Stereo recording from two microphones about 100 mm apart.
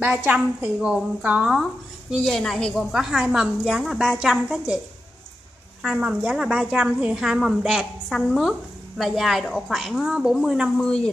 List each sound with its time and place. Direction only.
0.2 s a woman's voice: 20° right (ahead or behind)
1.5 s a woman's voice: centre (ahead or behind)
5.8 s a woman's voice: 10° right (ahead or behind)